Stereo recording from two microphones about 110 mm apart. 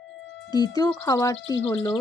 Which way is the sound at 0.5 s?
35° left (ahead or behind).